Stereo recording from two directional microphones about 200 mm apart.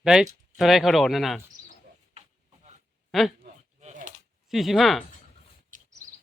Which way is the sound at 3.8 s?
40° right (ahead or behind).